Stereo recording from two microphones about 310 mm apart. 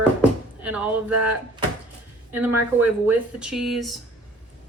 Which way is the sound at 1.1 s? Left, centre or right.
Right.